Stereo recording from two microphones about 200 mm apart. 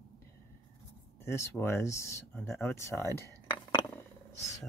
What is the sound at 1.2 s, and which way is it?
Speech, 15° left (ahead or behind).